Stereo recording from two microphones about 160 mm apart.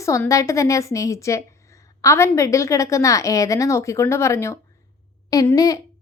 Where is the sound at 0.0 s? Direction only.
20° left (ahead or behind).